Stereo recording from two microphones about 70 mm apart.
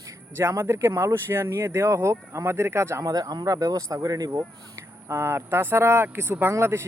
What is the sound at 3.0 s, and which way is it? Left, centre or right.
Speech, right.